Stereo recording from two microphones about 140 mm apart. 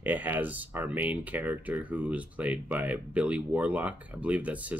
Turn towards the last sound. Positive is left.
turn(degrees=-10)  # may be behind; listen again after turning